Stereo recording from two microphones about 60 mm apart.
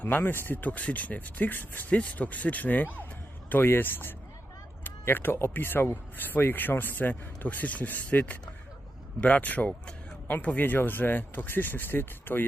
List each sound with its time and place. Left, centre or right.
0.0 s speech: left